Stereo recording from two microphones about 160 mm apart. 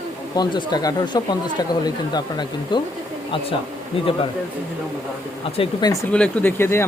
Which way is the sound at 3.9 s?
35° left (ahead or behind).